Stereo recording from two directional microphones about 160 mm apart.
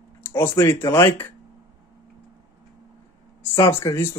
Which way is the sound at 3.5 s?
20° left (ahead or behind).